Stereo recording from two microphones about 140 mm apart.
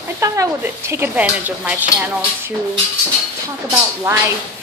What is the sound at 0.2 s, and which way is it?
Speech, 20° right (ahead or behind).